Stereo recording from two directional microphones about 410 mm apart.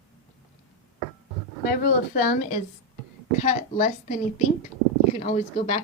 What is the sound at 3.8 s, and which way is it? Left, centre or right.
A woman's voice, centre.